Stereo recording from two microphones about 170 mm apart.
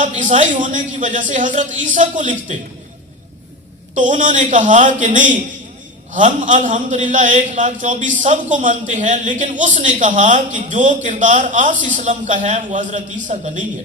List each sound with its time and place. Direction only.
0.0 s a man's voice: 45° right (ahead or behind)
3.9 s a man's voice: 45° right (ahead or behind)